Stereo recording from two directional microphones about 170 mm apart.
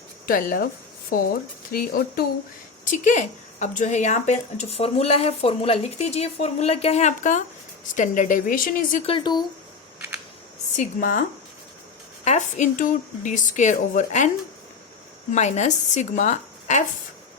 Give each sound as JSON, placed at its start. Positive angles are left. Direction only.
{"t": 0.3, "sound": "speech", "side_deg": 55}
{"t": 2.8, "sound": "a woman's voice", "side_deg": 50}
{"t": 9.0, "sound": "speech", "side_deg": 30}
{"t": 10.8, "sound": "a woman's voice", "side_deg": 50}
{"t": 15.3, "sound": "a woman's voice", "side_deg": 40}